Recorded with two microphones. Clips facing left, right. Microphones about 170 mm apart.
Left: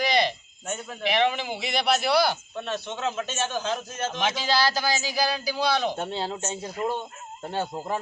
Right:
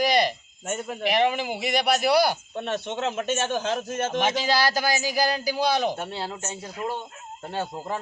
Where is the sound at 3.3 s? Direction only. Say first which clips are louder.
Right 4 dB; 55° right (ahead or behind).